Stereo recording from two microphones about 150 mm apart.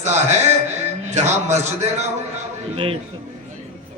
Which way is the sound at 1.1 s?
50° right (ahead or behind).